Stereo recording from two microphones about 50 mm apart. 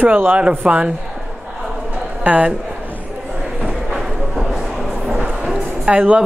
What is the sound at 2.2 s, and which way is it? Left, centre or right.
Speech, right.